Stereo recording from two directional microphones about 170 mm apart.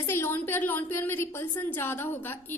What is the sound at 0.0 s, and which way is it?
A woman's voice, 15° left (ahead or behind).